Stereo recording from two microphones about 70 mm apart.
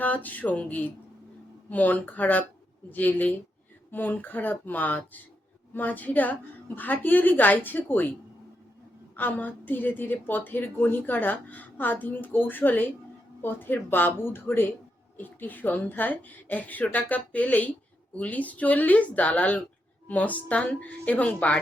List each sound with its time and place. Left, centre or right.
0.0 s a woman's voice: left
9.1 s a woman's voice: left